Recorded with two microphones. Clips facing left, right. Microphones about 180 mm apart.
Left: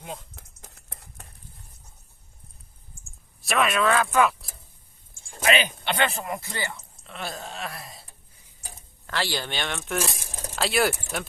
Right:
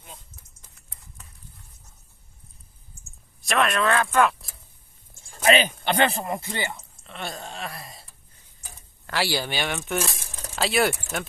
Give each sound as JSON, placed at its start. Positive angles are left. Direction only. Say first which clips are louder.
{"t": 0.0, "sound": "a sound", "louder": "left 10 dB", "side_deg": 80}
{"t": 3.4, "sound": "speech", "louder": "even", "side_deg": 0}
{"t": 5.5, "sound": "speech", "louder": "right 3 dB", "side_deg": -40}
{"t": 7.0, "sound": "wail", "louder": "even", "side_deg": 0}
{"t": 9.0, "sound": "speech", "louder": "right 3 dB", "side_deg": -10}